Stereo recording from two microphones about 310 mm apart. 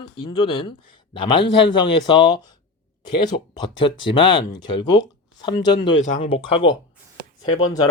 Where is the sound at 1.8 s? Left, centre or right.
Centre.